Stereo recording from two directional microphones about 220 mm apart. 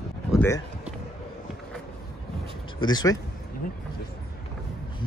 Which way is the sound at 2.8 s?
20° left (ahead or behind).